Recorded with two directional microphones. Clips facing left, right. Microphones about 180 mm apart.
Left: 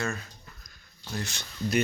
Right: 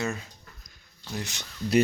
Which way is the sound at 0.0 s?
20° right (ahead or behind).